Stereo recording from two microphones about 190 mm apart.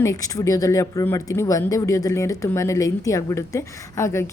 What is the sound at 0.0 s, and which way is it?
A woman's voice, 20° left (ahead or behind).